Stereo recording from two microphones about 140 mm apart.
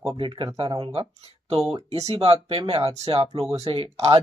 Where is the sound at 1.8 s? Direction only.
45° right (ahead or behind).